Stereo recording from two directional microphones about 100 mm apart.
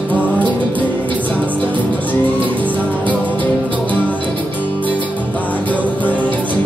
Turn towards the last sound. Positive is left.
turn(degrees=15)  # may be behind; listen again after turning